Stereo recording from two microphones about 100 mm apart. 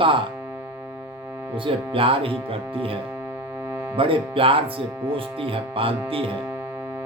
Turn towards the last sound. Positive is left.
turn(degrees=-65)  # may be behind; listen again after turning